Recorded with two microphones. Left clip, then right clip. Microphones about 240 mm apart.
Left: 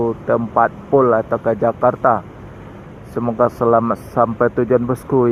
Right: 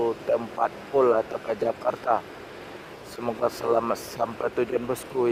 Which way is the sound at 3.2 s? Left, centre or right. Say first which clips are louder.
Left 10 dB; centre.